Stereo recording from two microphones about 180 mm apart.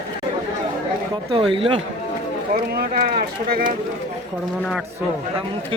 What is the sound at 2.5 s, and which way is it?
Speech, 55° right (ahead or behind).